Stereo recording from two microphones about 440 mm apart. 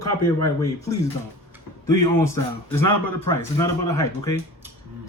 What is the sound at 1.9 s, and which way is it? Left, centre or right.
A man's voice, centre.